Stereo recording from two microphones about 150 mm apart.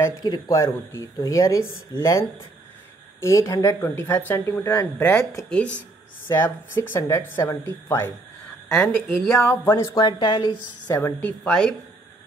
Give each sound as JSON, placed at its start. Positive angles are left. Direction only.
{"t": 0.0, "sound": "speech", "side_deg": 25}
{"t": 8.7, "sound": "speech", "side_deg": 5}
{"t": 9.3, "sound": "speech", "side_deg": 15}
{"t": 9.9, "sound": "speech", "side_deg": 30}
{"t": 11.0, "sound": "speech", "side_deg": 15}